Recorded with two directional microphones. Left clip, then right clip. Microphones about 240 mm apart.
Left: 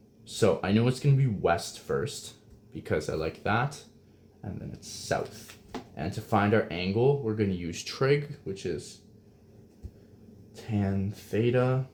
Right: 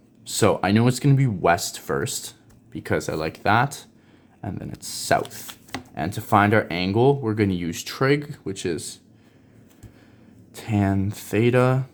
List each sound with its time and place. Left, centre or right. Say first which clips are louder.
0.3 s speech: right 6 dB; right
10.5 s speech: right 9 dB; right